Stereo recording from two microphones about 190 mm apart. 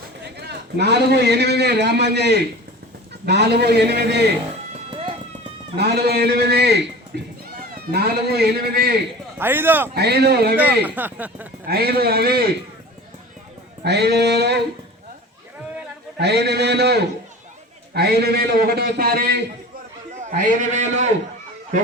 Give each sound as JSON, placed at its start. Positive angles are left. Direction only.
{"t": 0.3, "sound": "a man's voice", "side_deg": -60}
{"t": 4.9, "sound": "horse", "side_deg": -30}
{"t": 5.7, "sound": "a man's voice", "side_deg": -60}
{"t": 9.4, "sound": "speech", "side_deg": -10}
{"t": 9.9, "sound": "a man's voice", "side_deg": -60}
{"t": 10.6, "sound": "speech", "side_deg": -10}
{"t": 11.7, "sound": "a man's voice", "side_deg": -55}
{"t": 13.8, "sound": "a man's voice", "side_deg": -60}
{"t": 16.1, "sound": "a man's voice", "side_deg": -60}
{"t": 20.2, "sound": "a man's voice", "side_deg": -40}